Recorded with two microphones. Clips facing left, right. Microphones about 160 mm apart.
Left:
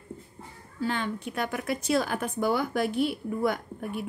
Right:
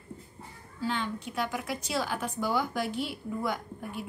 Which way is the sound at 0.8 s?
55° left (ahead or behind).